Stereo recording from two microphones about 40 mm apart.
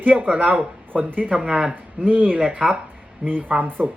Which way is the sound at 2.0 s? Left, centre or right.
Right.